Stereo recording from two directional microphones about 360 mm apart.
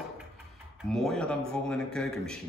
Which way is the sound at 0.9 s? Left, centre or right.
Centre.